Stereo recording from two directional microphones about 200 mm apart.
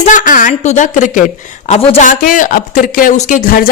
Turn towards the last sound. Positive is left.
turn(degrees=45)  # may be behind; listen again after turning